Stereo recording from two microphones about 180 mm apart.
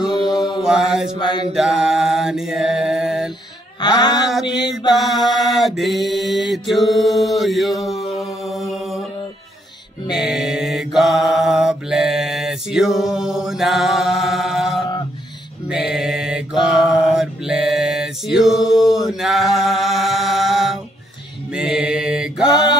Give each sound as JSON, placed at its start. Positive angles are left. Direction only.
{"t": 0.6, "sound": "mantra", "side_deg": -5}
{"t": 1.1, "sound": "mantra", "side_deg": 25}
{"t": 1.5, "sound": "mantra", "side_deg": -5}
{"t": 3.8, "sound": "mantra", "side_deg": 25}
{"t": 4.1, "sound": "mantra", "side_deg": 0}
{"t": 10.1, "sound": "mantra", "side_deg": 0}